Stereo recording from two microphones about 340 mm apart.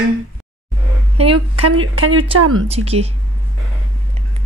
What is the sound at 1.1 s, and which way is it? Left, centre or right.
Speech, centre.